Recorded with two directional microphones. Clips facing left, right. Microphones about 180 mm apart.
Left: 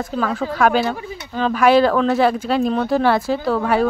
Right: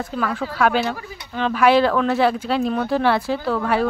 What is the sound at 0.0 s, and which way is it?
Speech, 40° left (ahead or behind).